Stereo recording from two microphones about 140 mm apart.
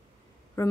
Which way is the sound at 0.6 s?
20° left (ahead or behind).